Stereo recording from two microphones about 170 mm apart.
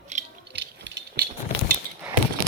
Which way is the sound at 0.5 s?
90° right.